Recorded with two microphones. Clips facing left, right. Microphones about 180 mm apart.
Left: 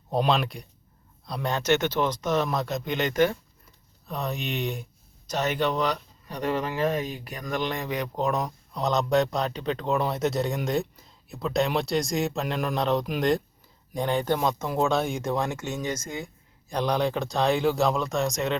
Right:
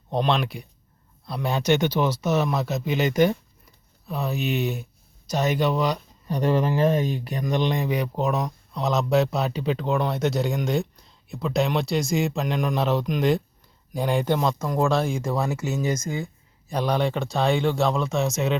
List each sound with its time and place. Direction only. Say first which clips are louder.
0.1 s speech: right 1 dB; 5° left (ahead or behind)
6.2 s speech: right 6 dB; 30° right (ahead or behind)
7.3 s speech: right 5 dB; 25° right (ahead or behind)
14.3 s speech: right 2 dB; 5° left (ahead or behind)